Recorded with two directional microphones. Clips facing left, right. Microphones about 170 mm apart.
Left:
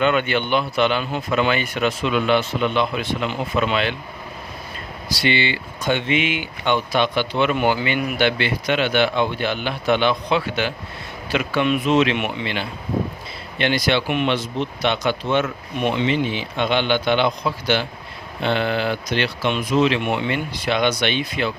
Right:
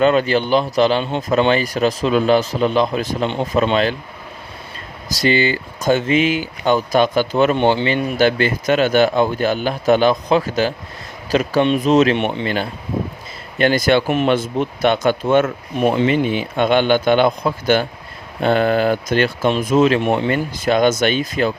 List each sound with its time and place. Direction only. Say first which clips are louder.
0.0 s speech: right 5 dB; 35° right (ahead or behind)
5.0 s speech: right 5 dB; 40° right (ahead or behind)
7.6 s speech: right 4 dB; 30° right (ahead or behind)
8.1 s speech: right 5 dB; 40° right (ahead or behind)